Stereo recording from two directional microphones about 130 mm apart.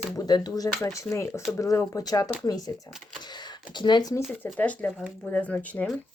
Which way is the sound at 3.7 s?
35° left (ahead or behind).